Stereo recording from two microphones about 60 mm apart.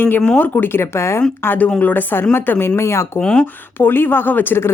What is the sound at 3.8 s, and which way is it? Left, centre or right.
Speech, left.